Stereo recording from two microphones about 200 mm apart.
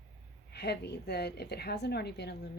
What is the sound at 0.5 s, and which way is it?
A woman's voice, 55° left (ahead or behind).